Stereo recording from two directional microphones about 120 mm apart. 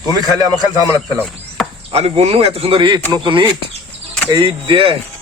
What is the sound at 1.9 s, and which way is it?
Speech, 55° right (ahead or behind).